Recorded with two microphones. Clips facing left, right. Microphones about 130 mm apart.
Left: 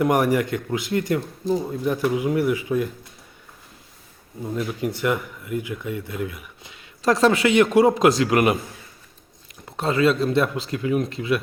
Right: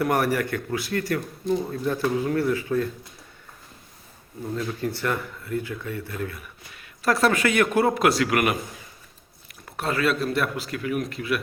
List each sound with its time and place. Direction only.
0.0 s speech: 15° left (ahead or behind)
4.4 s speech: 15° left (ahead or behind)
9.6 s speech: 25° left (ahead or behind)